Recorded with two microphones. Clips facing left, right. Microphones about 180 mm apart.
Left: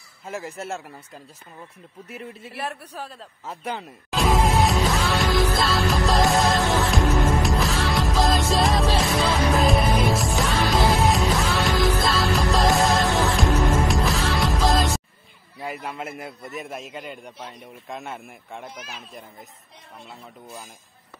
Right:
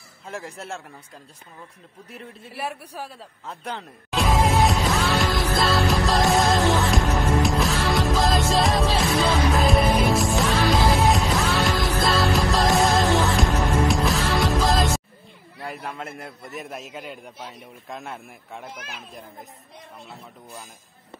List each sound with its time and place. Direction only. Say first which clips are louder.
0.2 s a man's voice: left 3 dB; 5° left (ahead or behind)
2.5 s a man's voice: right 2 dB; 10° right (ahead or behind)
3.4 s music: left 2 dB; 5° left (ahead or behind)
15.6 s a man's voice: left 2 dB; 5° left (ahead or behind)